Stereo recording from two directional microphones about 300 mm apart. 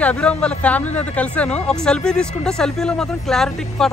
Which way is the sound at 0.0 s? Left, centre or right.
Centre.